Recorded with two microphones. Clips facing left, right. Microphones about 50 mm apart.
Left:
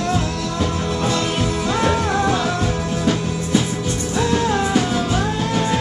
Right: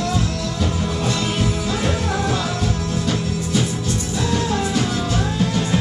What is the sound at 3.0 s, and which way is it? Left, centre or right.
Music, centre.